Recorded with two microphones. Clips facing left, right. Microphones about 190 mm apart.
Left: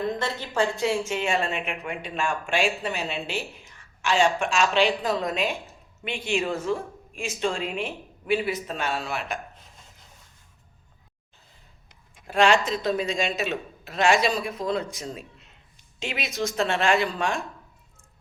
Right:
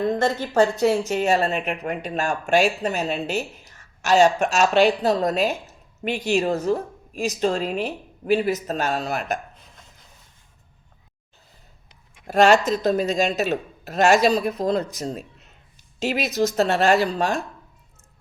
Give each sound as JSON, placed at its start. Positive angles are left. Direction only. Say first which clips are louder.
{"t": 0.2, "sound": "speech", "louder": "right 7 dB", "side_deg": -45}
{"t": 12.3, "sound": "speech", "louder": "right 5 dB", "side_deg": -40}